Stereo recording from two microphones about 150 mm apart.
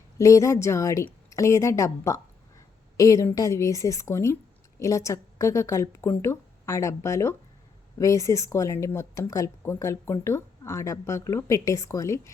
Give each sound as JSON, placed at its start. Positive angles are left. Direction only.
{"t": 0.2, "sound": "a woman's voice", "side_deg": 20}